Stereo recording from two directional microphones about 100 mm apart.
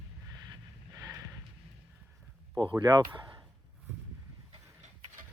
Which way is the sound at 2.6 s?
50° right (ahead or behind).